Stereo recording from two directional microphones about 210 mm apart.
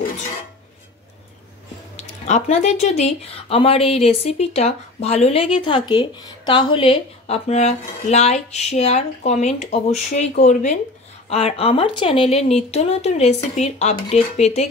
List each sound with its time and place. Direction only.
2.0 s a woman's voice: 30° left (ahead or behind)